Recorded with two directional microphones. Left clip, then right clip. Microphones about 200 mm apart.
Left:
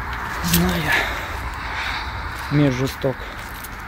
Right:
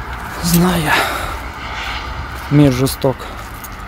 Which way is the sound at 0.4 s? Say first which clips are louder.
Right 6 dB; 20° right (ahead or behind).